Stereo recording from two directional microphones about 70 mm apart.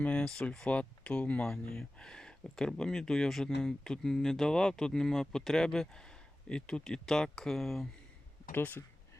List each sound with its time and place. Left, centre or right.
0.0 s speech: centre
8.5 s speech: left